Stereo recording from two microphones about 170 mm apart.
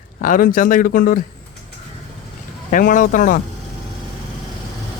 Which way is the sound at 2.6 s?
50° left (ahead or behind).